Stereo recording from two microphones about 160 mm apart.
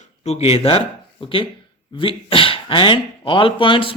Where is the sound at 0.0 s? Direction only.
40° left (ahead or behind).